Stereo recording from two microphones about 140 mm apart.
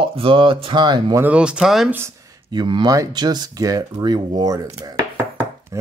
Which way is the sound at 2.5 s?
35° right (ahead or behind).